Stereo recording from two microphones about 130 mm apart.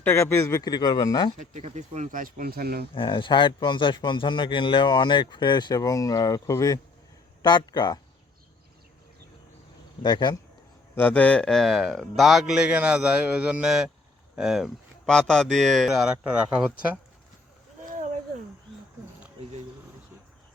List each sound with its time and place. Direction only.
0.0 s a man's voice: 20° left (ahead or behind)
1.4 s speech: 65° right (ahead or behind); by 2.6 s 90° right
2.9 s a man's voice: 40° left (ahead or behind)
10.0 s a man's voice: 35° left (ahead or behind)
10.9 s speech: 15° left (ahead or behind); by 16.7 s 10° right (ahead or behind)